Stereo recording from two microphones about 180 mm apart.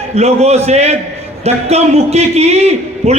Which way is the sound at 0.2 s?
35° right (ahead or behind).